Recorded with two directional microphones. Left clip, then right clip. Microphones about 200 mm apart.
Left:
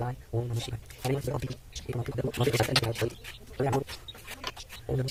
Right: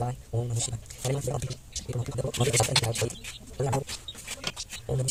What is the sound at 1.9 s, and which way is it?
A man's voice, 25° left (ahead or behind).